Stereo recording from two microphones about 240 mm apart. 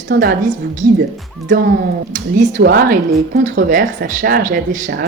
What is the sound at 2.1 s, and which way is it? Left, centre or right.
Speech, right.